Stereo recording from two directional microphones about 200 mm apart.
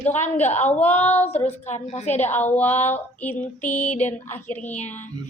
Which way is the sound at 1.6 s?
35° left (ahead or behind).